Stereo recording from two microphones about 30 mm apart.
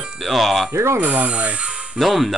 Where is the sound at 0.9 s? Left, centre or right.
Right.